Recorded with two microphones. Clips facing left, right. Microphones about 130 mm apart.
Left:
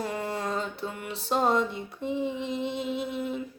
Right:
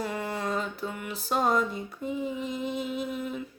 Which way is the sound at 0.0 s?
30° left (ahead or behind).